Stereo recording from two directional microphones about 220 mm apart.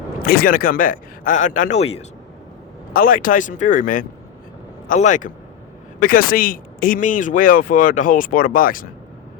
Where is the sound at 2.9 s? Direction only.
40° left (ahead or behind).